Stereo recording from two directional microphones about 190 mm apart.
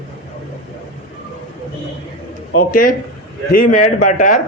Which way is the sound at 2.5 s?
50° left (ahead or behind).